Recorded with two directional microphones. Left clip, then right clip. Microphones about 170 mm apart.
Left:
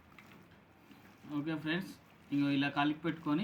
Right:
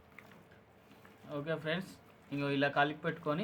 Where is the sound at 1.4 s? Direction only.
75° right (ahead or behind).